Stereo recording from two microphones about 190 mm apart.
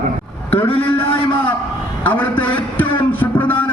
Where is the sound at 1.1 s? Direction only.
30° left (ahead or behind).